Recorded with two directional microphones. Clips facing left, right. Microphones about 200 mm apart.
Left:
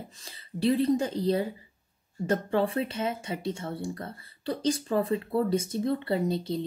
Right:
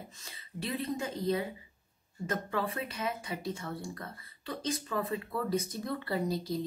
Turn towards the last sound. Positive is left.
turn(degrees=25)  # may be behind; listen again after turning